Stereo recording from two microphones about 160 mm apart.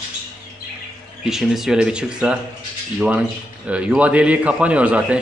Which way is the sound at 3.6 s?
10° right (ahead or behind).